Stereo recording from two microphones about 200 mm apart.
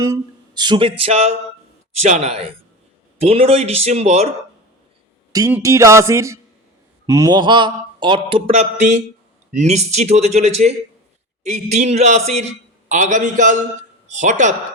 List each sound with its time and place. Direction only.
0.0 s mantra: 20° right (ahead or behind)
2.0 s speech: 35° right (ahead or behind)
5.3 s speech: 20° right (ahead or behind)
5.5 s music: 15° right (ahead or behind)
7.1 s mantra: 15° right (ahead or behind)
9.6 s speech: 35° right (ahead or behind)